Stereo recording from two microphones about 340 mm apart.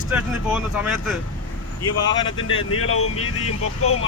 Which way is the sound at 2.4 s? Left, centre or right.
Left.